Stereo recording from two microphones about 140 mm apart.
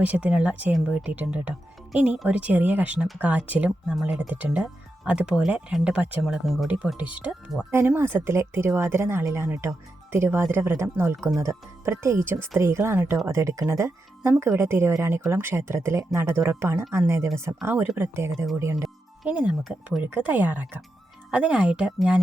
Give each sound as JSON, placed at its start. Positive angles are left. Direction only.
{"t": 0.0, "sound": "speech", "side_deg": -10}